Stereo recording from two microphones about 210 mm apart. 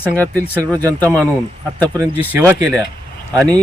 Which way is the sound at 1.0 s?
10° left (ahead or behind).